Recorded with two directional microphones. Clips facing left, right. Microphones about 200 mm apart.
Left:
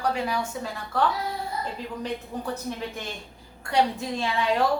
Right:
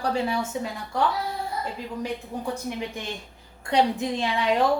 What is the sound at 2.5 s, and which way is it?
A woman's voice, 15° right (ahead or behind).